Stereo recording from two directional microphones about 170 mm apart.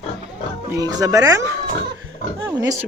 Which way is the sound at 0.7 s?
20° right (ahead or behind).